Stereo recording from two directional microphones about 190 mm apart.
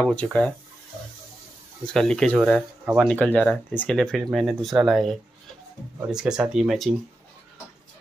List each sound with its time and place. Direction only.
0.0 s speech: 5° left (ahead or behind)
2.0 s speech: 5° left (ahead or behind)
3.1 s speech: 10° left (ahead or behind)